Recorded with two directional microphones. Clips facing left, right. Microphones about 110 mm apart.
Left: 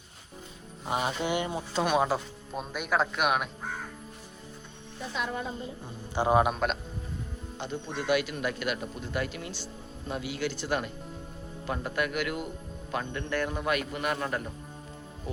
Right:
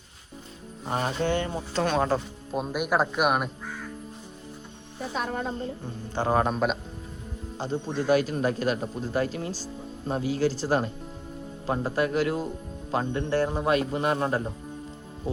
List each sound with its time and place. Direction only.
0.9 s speech: 10° left (ahead or behind)
2.6 s speech: 5° right (ahead or behind)
3.6 s crow: 45° left (ahead or behind)
5.1 s music: 45° right (ahead or behind)
6.1 s speech: 15° left (ahead or behind)
7.6 s a man's voice: 35° right (ahead or behind)